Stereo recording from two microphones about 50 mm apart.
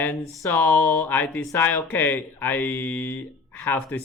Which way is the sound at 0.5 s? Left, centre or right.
Left.